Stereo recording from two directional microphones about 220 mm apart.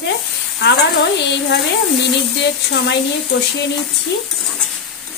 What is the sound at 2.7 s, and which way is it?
Speech, 50° left (ahead or behind).